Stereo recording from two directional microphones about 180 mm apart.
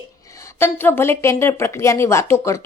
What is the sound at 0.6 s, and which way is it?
Speech, 10° left (ahead or behind).